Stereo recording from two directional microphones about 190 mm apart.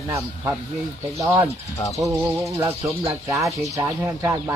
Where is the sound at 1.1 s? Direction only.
15° right (ahead or behind).